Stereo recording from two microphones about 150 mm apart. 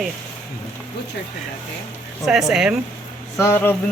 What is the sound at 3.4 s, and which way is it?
Speech, 15° left (ahead or behind).